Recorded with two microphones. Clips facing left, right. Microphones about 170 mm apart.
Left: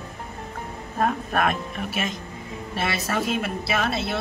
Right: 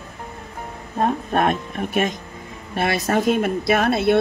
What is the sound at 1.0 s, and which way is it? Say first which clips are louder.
Speech: right 3 dB; 30° right (ahead or behind).